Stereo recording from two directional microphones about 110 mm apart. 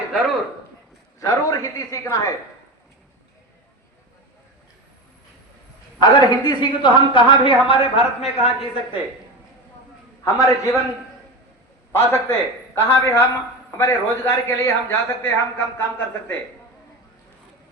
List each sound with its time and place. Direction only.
1.2 s speech: 30° left (ahead or behind)
6.0 s a woman's voice: 40° left (ahead or behind); by 9.0 s 65° left (ahead or behind)
10.2 s a man's voice: 30° left (ahead or behind)
11.9 s a man's voice: 20° left (ahead or behind)